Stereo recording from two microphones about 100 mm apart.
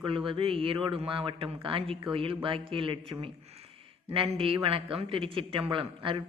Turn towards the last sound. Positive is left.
turn(degrees=-60)  # may be behind; listen again after turning